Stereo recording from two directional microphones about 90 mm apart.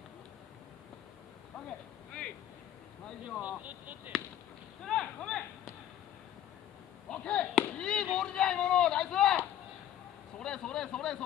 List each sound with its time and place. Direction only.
3.3 s speech: 15° right (ahead or behind)
4.8 s a sound: 10° left (ahead or behind)
7.1 s speech: 10° left (ahead or behind)
10.4 s a man's voice: 10° left (ahead or behind)